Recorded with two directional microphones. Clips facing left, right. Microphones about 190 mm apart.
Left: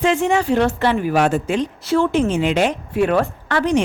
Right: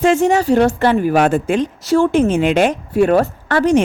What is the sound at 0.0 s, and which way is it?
Speech, 45° right (ahead or behind).